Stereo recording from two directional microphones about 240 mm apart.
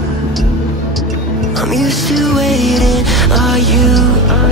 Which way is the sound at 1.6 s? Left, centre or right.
Centre.